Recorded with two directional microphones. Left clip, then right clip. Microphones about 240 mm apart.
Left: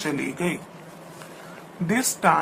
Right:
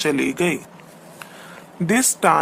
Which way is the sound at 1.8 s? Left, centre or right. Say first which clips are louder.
Right 4 dB; right.